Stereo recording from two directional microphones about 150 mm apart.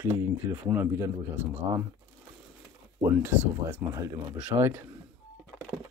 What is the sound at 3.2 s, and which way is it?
A man's voice, 15° right (ahead or behind).